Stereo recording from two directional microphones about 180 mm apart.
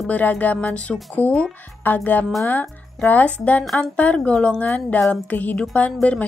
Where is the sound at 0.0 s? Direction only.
10° left (ahead or behind).